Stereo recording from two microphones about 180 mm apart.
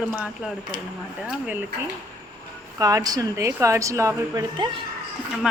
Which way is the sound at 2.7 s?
20° right (ahead or behind).